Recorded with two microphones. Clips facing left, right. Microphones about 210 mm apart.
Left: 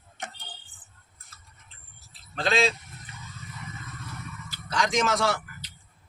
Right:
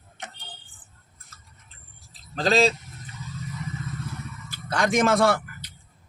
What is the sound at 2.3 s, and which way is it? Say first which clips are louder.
Speech: right 4 dB; 40° right (ahead or behind).